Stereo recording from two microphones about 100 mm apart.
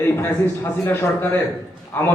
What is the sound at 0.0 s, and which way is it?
A man's voice, 20° left (ahead or behind).